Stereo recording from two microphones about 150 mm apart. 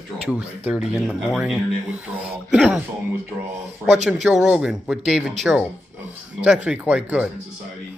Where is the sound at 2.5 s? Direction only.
10° right (ahead or behind).